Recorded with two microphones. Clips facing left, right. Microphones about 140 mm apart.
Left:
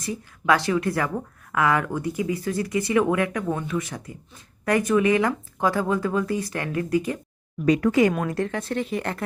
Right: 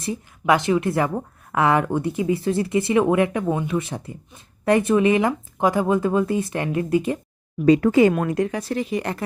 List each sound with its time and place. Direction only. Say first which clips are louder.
0.0 s a woman's voice: right 3 dB; 25° right (ahead or behind)
8.3 s speech: right 4 dB; 15° right (ahead or behind)
8.5 s speech: right 2 dB; centre (ahead or behind)